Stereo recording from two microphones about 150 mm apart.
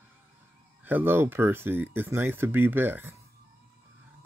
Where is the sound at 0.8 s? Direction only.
15° right (ahead or behind).